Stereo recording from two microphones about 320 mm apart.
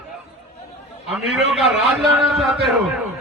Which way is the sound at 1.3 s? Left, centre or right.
Centre.